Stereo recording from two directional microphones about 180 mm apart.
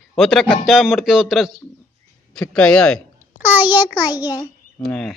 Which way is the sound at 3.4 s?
10° right (ahead or behind).